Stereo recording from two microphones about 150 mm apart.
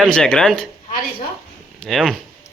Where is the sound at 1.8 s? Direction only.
Centre (ahead or behind).